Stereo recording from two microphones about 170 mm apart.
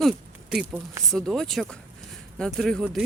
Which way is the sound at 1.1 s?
Centre (ahead or behind).